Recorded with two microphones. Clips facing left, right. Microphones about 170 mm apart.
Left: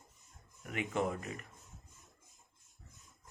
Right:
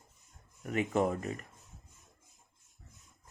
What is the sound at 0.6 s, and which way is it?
Speech, 40° right (ahead or behind).